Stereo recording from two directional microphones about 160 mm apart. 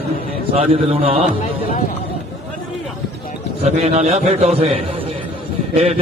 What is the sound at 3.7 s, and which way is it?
A man's voice, 45° right (ahead or behind).